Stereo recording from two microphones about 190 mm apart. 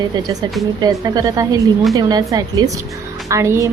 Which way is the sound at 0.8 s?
20° right (ahead or behind).